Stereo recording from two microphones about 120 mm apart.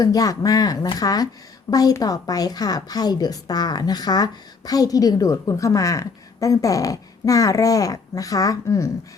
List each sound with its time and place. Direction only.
0.0 s a woman's voice: 30° left (ahead or behind)